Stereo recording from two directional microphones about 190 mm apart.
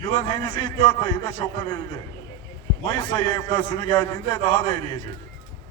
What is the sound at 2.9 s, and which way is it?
A man's voice, 20° left (ahead or behind).